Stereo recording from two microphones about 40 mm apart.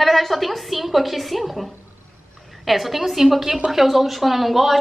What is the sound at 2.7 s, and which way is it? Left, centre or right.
Speech, centre.